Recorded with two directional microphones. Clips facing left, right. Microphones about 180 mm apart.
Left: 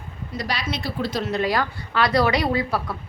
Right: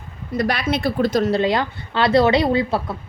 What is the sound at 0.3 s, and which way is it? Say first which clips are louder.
Speech: right 7 dB; 55° right (ahead or behind).